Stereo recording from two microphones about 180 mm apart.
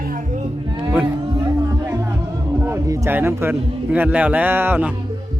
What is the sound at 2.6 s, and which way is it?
A man's voice, 15° right (ahead or behind).